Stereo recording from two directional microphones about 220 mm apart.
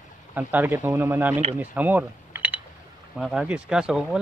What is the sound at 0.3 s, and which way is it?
Speech, 5° right (ahead or behind).